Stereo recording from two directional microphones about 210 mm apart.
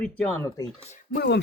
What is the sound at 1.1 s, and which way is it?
Speech, 50° left (ahead or behind).